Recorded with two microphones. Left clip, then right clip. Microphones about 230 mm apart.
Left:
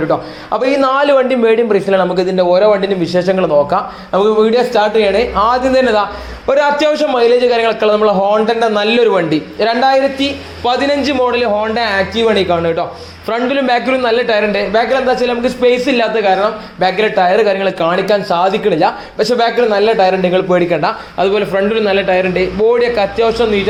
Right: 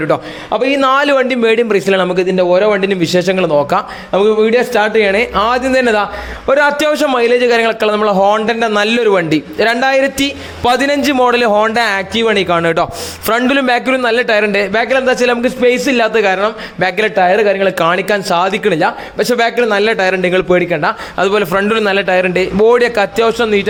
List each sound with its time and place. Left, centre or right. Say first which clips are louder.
0.5 s a man's voice: right 1 dB; right